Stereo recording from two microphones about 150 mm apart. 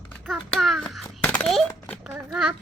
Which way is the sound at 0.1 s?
10° left (ahead or behind).